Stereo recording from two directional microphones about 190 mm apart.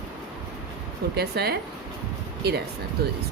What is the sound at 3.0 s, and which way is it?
Speech, 55° right (ahead or behind).